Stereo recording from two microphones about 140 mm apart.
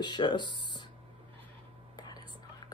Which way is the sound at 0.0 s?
35° left (ahead or behind).